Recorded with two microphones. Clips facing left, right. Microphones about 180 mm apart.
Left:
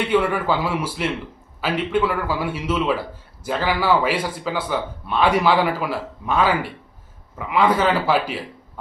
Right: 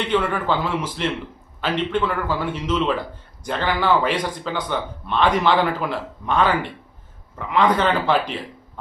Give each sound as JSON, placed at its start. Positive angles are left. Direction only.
{"t": 0.0, "sound": "speech", "side_deg": 10}